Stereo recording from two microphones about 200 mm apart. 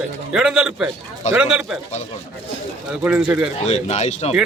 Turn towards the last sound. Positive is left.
turn(degrees=35)  # may be behind; listen again after turning